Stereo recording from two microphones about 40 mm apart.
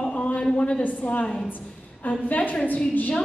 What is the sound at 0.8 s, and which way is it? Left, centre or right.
Speech, left.